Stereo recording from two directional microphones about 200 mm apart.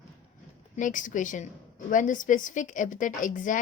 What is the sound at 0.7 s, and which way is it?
A woman's voice, 40° left (ahead or behind).